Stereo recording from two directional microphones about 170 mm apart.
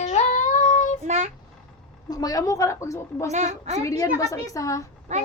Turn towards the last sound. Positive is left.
turn(degrees=-40)  # may be behind; listen again after turning